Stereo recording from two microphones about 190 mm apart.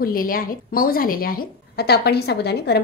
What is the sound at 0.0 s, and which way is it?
A woman's voice, 50° left (ahead or behind).